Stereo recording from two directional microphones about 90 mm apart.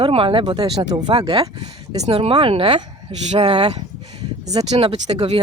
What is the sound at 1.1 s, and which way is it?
Speech, 65° right (ahead or behind).